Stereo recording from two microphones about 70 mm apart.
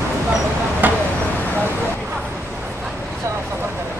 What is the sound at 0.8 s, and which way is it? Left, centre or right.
Vehicle, right.